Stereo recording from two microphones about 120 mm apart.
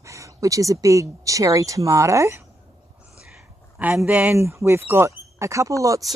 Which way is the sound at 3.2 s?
10° right (ahead or behind).